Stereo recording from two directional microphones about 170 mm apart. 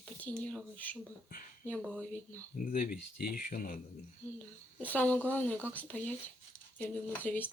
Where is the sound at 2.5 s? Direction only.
55° left (ahead or behind).